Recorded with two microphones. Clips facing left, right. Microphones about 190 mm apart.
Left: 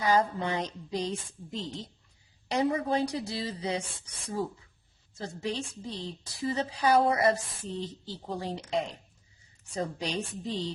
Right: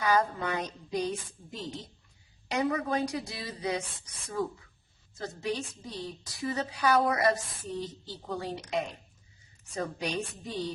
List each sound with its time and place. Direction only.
0.0 s a woman's voice: 30° left (ahead or behind)
9.6 s a woman's voice: 30° left (ahead or behind)